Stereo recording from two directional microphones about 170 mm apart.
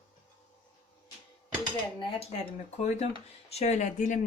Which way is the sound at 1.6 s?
30° left (ahead or behind).